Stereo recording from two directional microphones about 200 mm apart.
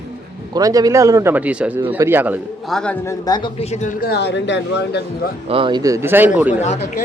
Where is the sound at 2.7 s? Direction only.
10° left (ahead or behind); by 5.3 s 60° left (ahead or behind).